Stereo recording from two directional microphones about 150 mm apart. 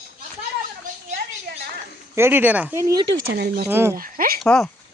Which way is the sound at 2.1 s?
15° right (ahead or behind).